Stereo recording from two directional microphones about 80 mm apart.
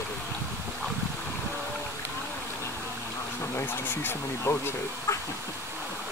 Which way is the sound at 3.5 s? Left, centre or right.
Left.